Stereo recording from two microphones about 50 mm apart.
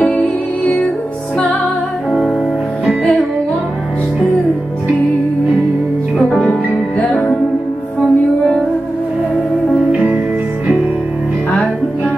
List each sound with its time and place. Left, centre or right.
0.0 s music: left
6.2 s music: left
8.0 s music: centre